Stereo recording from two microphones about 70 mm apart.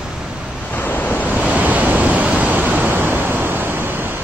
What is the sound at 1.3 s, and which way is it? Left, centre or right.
Waves, right.